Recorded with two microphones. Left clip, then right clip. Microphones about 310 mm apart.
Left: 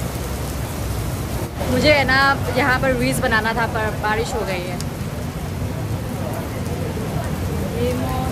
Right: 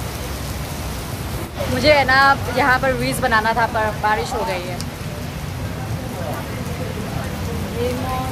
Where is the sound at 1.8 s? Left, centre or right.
Centre.